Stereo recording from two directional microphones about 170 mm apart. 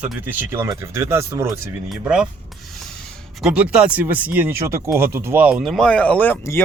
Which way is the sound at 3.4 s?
5° right (ahead or behind).